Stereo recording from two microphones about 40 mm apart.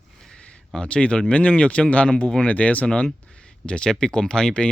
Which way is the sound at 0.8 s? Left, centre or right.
Left.